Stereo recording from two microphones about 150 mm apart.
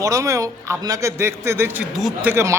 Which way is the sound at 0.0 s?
20° right (ahead or behind).